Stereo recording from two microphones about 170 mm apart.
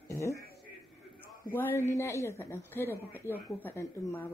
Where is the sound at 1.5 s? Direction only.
10° left (ahead or behind).